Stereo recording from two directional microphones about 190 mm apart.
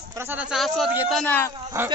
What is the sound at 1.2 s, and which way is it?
Speech, 10° left (ahead or behind).